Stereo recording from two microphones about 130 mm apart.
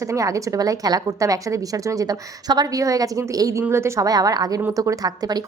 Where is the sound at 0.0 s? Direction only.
25° right (ahead or behind).